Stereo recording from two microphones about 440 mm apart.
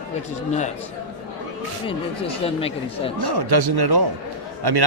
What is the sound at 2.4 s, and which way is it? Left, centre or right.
Speech, centre.